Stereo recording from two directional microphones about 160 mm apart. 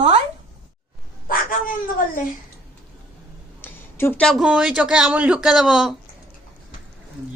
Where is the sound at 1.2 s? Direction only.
60° left (ahead or behind).